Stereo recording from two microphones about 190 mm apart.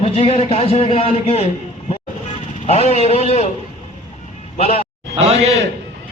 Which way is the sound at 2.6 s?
35° left (ahead or behind).